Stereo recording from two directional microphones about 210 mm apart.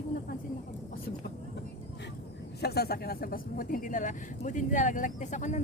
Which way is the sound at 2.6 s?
50° left (ahead or behind).